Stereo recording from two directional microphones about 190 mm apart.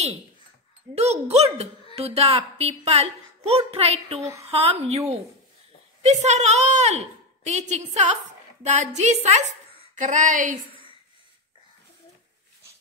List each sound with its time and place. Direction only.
0.9 s a woman's voice: 35° right (ahead or behind)